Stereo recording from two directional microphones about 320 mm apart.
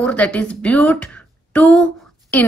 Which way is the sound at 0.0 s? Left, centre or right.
Centre.